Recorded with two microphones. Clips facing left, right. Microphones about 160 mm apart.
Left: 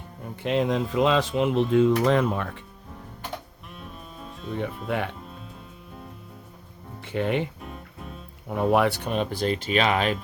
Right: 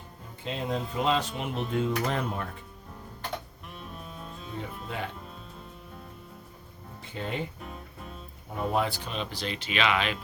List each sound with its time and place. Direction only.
0.4 s speech: 80° left
4.5 s speech: 65° left (ahead or behind)
7.1 s speech: 70° left (ahead or behind)
8.4 s speech: 70° left (ahead or behind); by 10.2 s 40° left (ahead or behind)